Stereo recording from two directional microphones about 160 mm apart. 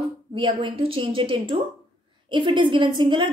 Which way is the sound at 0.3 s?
30° right (ahead or behind).